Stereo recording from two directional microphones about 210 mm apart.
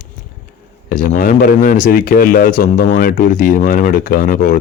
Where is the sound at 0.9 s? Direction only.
40° left (ahead or behind).